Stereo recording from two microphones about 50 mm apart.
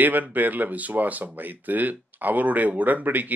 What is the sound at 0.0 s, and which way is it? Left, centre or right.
Speech, right.